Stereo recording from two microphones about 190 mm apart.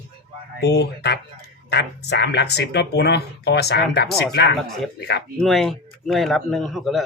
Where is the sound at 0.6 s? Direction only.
60° left (ahead or behind).